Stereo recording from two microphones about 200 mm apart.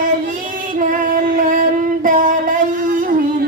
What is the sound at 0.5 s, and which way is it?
Singing, 45° right (ahead or behind).